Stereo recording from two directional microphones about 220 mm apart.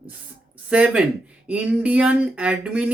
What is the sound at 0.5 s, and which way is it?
Speech, 5° right (ahead or behind).